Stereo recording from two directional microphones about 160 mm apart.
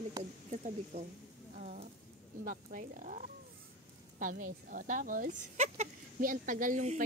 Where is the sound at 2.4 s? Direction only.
60° right (ahead or behind).